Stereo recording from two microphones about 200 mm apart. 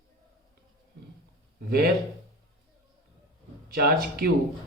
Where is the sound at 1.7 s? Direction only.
50° right (ahead or behind).